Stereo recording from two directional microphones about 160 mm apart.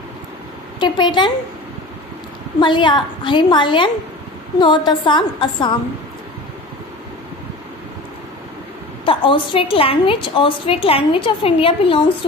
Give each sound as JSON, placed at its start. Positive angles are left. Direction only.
{"t": 0.7, "sound": "a woman's voice", "side_deg": 30}
{"t": 2.6, "sound": "a woman's voice", "side_deg": 30}
{"t": 9.0, "sound": "a woman's voice", "side_deg": 35}